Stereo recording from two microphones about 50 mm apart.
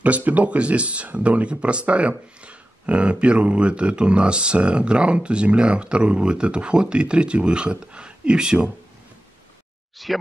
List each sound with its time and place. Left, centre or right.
0.0 s speech: right
10.0 s speech: centre